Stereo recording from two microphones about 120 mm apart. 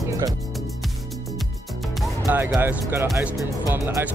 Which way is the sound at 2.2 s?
20° right (ahead or behind).